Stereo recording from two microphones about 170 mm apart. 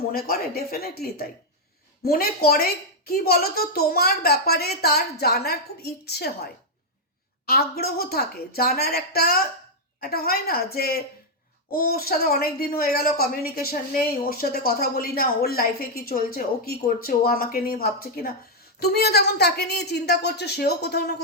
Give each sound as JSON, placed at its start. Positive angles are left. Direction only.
{"t": 0.1, "sound": "a child's voice", "side_deg": 65}